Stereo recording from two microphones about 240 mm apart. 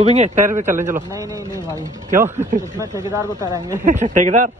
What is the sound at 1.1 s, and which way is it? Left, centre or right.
Speech, centre.